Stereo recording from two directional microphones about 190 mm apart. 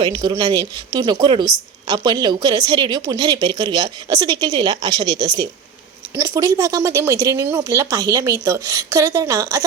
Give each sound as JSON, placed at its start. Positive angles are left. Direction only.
{"t": 0.0, "sound": "a woman's voice", "side_deg": -25}